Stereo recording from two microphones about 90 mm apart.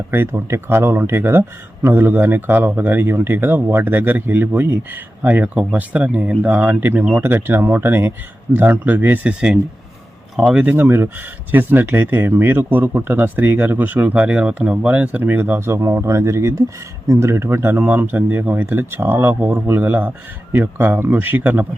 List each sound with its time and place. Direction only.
0.1 s speech: 25° right (ahead or behind)
10.3 s speech: 10° right (ahead or behind)
10.7 s speech: 25° right (ahead or behind)